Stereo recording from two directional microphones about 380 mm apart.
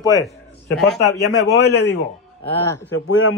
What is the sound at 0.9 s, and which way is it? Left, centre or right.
Speech, left.